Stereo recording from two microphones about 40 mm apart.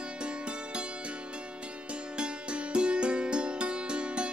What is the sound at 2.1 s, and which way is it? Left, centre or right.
Music, right.